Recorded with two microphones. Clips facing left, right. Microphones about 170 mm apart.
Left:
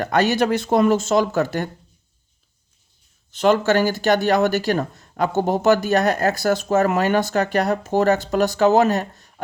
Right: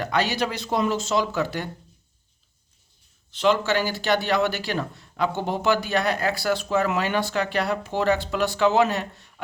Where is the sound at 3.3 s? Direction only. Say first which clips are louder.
Left 5 dB; 45° left (ahead or behind).